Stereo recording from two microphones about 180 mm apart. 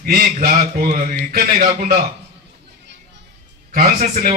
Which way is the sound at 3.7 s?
50° right (ahead or behind).